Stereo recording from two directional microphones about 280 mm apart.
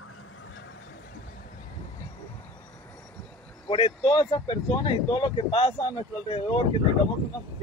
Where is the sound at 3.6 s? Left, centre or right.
Left.